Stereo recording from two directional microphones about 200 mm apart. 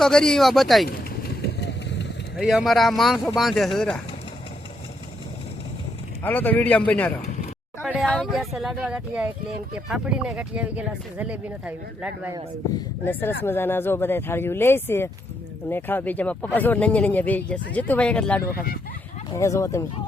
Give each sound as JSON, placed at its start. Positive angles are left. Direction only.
{"t": 0.0, "sound": "speech", "side_deg": 5}
{"t": 0.9, "sound": "vehicle", "side_deg": 50}
{"t": 2.3, "sound": "speech", "side_deg": 0}
{"t": 6.2, "sound": "speech", "side_deg": 10}
{"t": 7.8, "sound": "a sound", "side_deg": -5}
{"t": 8.1, "sound": "speech", "side_deg": 0}
{"t": 13.1, "sound": "speech", "side_deg": 10}